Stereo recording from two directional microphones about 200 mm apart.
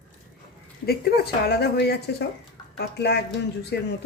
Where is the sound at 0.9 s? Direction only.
50° left (ahead or behind).